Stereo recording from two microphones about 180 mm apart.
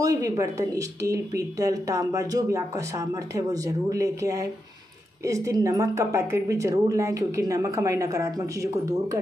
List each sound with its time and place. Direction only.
0.0 s speech: 20° right (ahead or behind)